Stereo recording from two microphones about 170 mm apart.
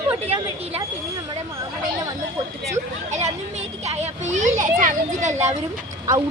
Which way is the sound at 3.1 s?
40° right (ahead or behind).